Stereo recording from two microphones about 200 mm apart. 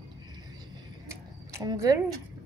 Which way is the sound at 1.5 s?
15° right (ahead or behind).